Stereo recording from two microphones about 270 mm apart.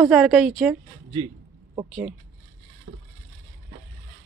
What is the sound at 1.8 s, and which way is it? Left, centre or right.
Speech, centre.